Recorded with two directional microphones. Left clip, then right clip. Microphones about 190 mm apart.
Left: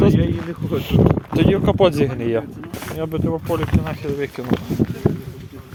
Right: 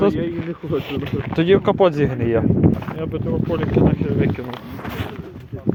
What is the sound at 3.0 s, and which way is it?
Speech, 25° left (ahead or behind).